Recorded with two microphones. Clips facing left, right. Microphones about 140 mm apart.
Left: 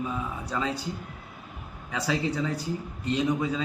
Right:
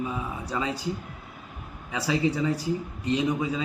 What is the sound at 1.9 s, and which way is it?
Speech, 10° right (ahead or behind).